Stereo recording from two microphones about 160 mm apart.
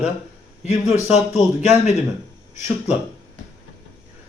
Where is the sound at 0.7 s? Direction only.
45° left (ahead or behind).